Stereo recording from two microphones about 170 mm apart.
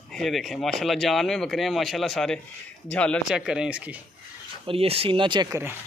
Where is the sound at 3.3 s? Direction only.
5° right (ahead or behind).